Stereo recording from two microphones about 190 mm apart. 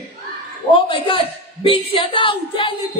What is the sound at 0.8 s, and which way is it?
A woman's voice, 25° left (ahead or behind).